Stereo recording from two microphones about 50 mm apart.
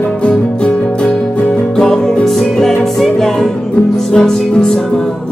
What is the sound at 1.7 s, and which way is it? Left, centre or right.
Music, centre.